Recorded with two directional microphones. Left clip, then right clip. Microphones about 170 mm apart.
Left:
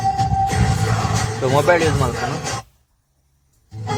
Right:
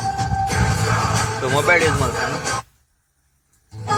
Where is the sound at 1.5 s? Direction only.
45° left (ahead or behind).